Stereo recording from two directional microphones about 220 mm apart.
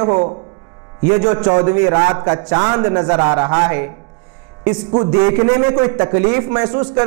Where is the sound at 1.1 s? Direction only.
20° right (ahead or behind).